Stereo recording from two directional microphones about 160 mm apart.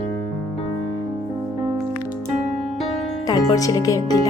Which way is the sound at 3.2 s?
25° left (ahead or behind).